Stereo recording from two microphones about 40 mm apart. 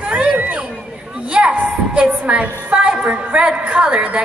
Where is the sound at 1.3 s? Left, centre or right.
Right.